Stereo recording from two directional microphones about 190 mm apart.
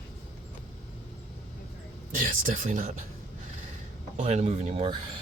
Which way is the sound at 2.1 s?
45° right (ahead or behind).